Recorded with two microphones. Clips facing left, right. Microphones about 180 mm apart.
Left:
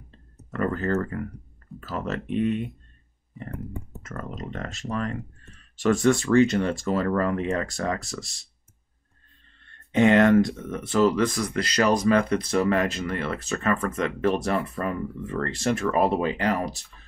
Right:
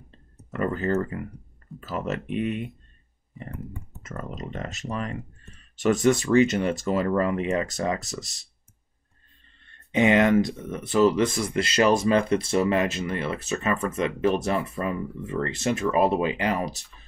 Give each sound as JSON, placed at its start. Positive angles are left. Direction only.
{"t": 0.5, "sound": "speech", "side_deg": -20}
{"t": 4.0, "sound": "speech", "side_deg": -20}
{"t": 9.9, "sound": "speech", "side_deg": -15}